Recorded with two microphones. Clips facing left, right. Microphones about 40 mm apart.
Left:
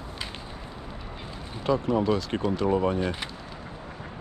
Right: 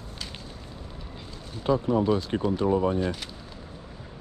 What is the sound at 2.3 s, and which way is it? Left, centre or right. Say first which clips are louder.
Speech: right 1 dB; left.